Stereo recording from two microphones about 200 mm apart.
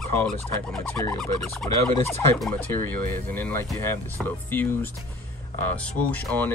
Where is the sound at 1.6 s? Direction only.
10° left (ahead or behind).